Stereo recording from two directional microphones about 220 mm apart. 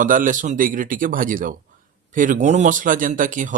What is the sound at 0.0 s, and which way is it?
Speech, 35° right (ahead or behind).